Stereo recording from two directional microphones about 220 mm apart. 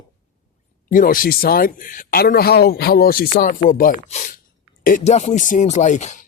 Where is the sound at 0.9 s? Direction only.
40° left (ahead or behind).